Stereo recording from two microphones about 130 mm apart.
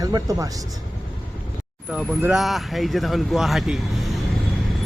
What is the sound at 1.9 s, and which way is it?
A man's voice, 5° right (ahead or behind).